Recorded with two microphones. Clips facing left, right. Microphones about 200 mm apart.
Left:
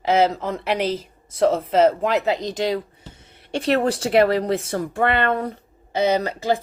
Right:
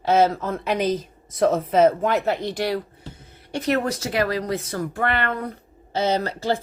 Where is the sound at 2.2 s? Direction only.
15° left (ahead or behind).